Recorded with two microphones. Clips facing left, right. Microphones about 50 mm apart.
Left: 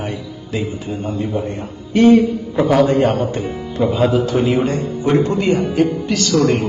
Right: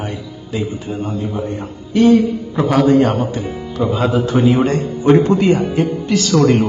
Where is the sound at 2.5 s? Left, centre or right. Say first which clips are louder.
Right 1 dB; centre.